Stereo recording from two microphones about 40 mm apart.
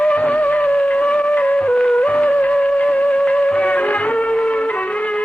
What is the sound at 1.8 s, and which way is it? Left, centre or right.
Music, left.